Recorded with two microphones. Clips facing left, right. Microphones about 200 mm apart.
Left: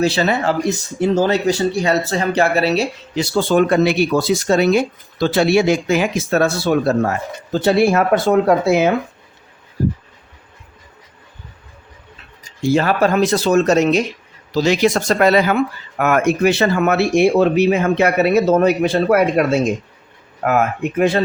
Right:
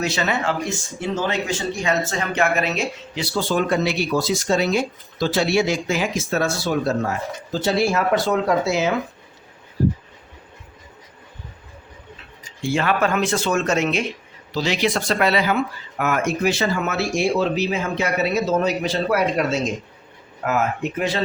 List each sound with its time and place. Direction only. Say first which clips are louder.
0.0 s speech: left 6 dB; 35° left (ahead or behind)
3.3 s speech: left 6 dB; 60° left (ahead or behind)
12.4 s speech: left 7 dB; 40° left (ahead or behind)